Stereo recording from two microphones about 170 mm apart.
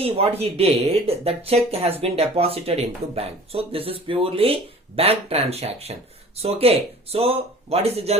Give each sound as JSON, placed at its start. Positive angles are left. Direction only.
{"t": 0.0, "sound": "speech", "side_deg": -35}